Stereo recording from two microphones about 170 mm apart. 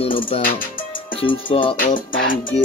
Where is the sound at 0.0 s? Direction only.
35° left (ahead or behind).